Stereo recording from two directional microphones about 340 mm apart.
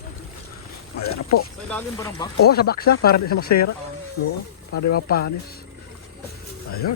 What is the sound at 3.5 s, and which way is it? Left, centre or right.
Speech, left.